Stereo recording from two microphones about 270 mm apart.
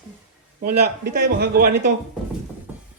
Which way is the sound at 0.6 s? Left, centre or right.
Right.